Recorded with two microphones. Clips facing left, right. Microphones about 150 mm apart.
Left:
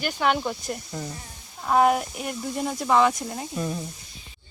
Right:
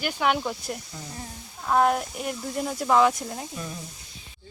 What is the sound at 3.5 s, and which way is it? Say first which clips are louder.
Speech: left 7 dB; 35° left (ahead or behind).